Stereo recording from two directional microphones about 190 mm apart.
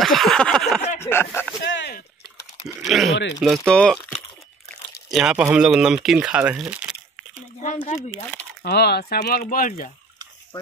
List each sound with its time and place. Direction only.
0.0 s a sound: centre (ahead or behind)
1.0 s speech: 10° left (ahead or behind)
1.6 s speech: 65° left (ahead or behind)
2.8 s speech: centre (ahead or behind)
5.1 s speech: 5° right (ahead or behind)
7.6 s speech: 40° left (ahead or behind)
8.6 s speech: 60° left (ahead or behind)